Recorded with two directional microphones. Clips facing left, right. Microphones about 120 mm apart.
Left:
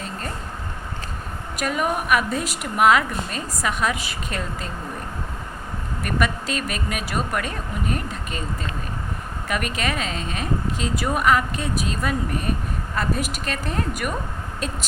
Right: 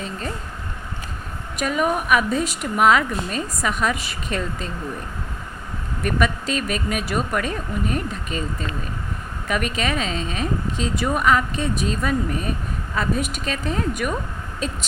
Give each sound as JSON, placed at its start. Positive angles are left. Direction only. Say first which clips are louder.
{"t": 1.5, "sound": "a woman's voice", "louder": "right 2 dB", "side_deg": 0}
{"t": 6.0, "sound": "a woman's voice", "louder": "right 2 dB", "side_deg": 0}
{"t": 9.5, "sound": "a woman's voice", "louder": "right 2 dB", "side_deg": 0}